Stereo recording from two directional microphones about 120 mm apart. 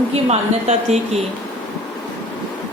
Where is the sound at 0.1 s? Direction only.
65° right (ahead or behind).